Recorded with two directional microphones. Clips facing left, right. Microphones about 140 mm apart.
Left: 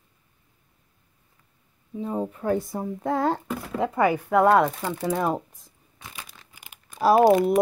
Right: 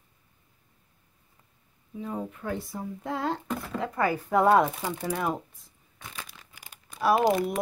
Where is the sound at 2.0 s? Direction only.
35° left (ahead or behind).